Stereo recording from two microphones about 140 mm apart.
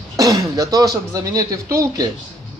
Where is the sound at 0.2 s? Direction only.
25° right (ahead or behind).